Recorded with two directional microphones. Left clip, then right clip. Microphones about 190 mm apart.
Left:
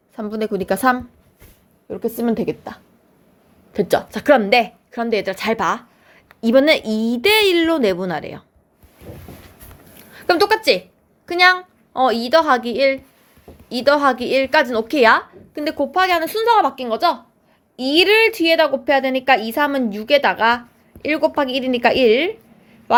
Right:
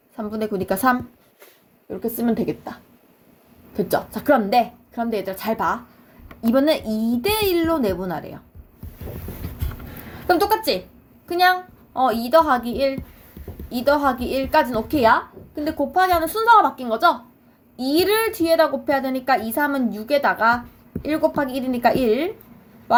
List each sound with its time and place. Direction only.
0.2 s a woman's voice: 30° left (ahead or behind)
10.5 s a woman's voice: 30° left (ahead or behind)